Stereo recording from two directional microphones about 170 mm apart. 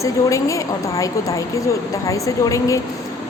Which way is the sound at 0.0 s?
20° left (ahead or behind).